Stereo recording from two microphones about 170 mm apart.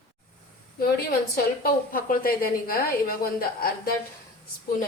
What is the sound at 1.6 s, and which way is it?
Speech, 60° left (ahead or behind).